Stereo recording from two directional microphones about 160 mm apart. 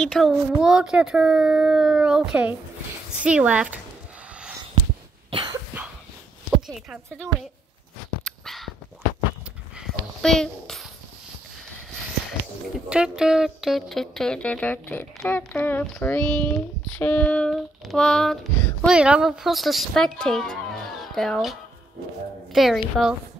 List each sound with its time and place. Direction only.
0.0 s speech: 5° left (ahead or behind)
5.3 s cough: 30° right (ahead or behind)
6.7 s speech: centre (ahead or behind)
8.2 s dog: 5° left (ahead or behind)
9.8 s dog: 5° left (ahead or behind)
12.7 s speech: 5° right (ahead or behind)